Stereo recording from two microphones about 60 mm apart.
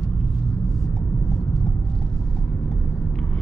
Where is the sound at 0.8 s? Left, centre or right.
Centre.